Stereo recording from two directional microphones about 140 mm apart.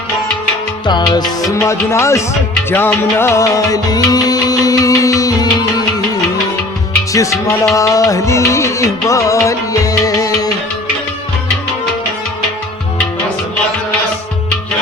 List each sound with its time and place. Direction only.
0.9 s music: 30° left (ahead or behind)
7.1 s music: 25° left (ahead or behind)